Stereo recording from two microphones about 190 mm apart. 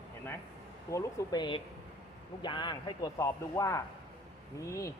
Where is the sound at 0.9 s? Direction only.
20° left (ahead or behind).